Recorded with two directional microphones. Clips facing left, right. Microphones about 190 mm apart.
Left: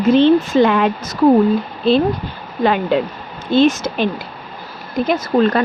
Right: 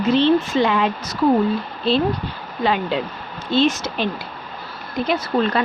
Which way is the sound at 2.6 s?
55° left (ahead or behind).